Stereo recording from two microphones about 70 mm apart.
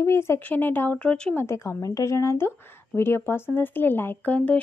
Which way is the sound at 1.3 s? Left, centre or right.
Left.